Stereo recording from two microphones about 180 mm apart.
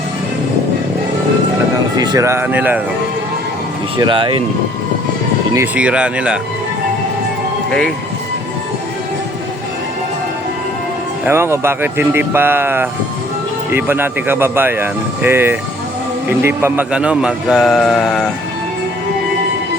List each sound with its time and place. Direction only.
2.0 s speech: 20° right (ahead or behind)
3.9 s speech: 25° right (ahead or behind)
5.5 s speech: 5° right (ahead or behind)
7.7 s a man's voice: 5° left (ahead or behind)
11.3 s a man's voice: 15° right (ahead or behind)